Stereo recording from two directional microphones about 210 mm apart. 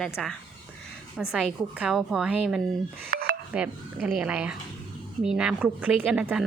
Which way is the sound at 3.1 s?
45° right (ahead or behind).